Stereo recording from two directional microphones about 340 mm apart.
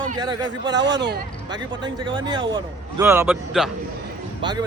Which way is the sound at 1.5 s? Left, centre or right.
Centre.